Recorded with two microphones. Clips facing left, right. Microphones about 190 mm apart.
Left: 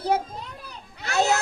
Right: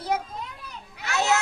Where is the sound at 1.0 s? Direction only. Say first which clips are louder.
Left 2 dB; 35° left (ahead or behind).